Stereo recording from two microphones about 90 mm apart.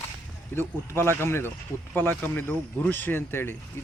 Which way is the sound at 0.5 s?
25° left (ahead or behind).